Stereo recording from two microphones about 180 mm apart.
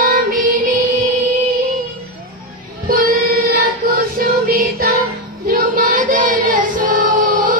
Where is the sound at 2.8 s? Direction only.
50° right (ahead or behind).